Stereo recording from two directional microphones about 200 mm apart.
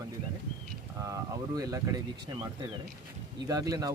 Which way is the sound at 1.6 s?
15° right (ahead or behind).